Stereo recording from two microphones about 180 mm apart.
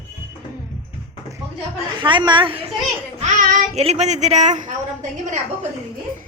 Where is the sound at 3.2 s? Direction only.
40° right (ahead or behind).